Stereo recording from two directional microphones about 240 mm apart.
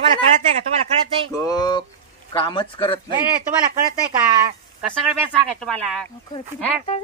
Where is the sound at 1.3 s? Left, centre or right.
Centre.